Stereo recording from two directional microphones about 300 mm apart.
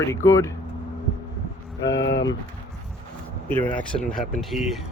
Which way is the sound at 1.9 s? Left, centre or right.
Left.